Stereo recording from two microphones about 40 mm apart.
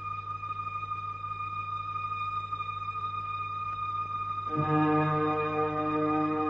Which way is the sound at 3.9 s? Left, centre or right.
Centre.